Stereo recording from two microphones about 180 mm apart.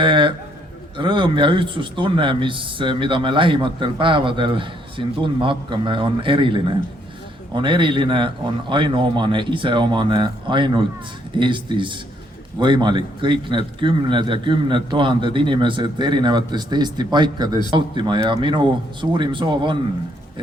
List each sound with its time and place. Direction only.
0.0 s a man's voice: 25° right (ahead or behind)